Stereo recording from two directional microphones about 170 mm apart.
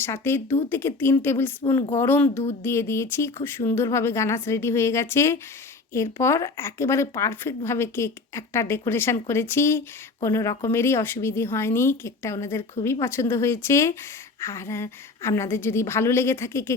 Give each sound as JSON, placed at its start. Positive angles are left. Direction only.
{"t": 0.0, "sound": "a woman's voice", "side_deg": 15}